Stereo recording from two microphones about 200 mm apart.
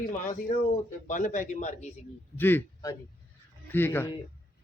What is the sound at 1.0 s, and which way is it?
Speech, 40° left (ahead or behind).